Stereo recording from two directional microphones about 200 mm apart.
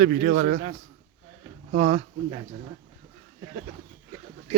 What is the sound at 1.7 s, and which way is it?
Speech, 35° right (ahead or behind).